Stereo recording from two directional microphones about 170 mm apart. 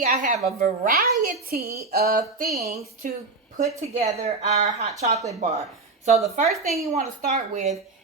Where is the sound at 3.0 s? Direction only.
50° right (ahead or behind).